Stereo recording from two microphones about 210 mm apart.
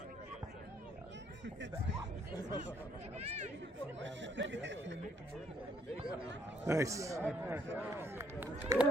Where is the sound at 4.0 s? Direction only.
60° right (ahead or behind).